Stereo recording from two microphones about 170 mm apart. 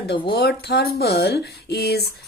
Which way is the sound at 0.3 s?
75° left (ahead or behind).